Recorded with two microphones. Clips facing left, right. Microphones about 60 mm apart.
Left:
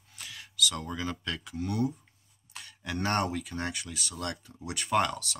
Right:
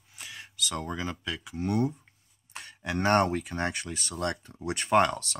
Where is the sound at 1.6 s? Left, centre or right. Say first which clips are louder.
Right 3 dB; right.